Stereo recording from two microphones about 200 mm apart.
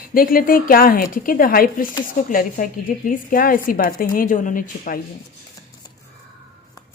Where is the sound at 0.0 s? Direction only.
45° left (ahead or behind).